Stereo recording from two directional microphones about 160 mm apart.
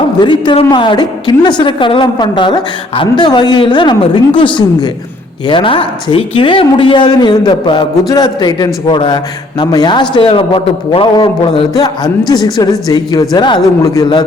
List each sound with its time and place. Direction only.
0.2 s a woman's voice: 30° left (ahead or behind)